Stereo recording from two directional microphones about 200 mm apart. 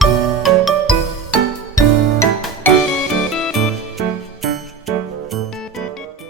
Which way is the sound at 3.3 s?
Centre (ahead or behind).